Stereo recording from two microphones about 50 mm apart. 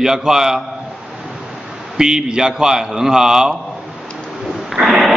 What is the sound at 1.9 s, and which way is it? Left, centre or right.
A man's voice, centre.